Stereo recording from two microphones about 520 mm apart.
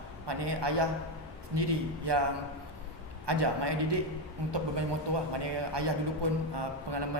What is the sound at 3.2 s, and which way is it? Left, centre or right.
A man's voice, right.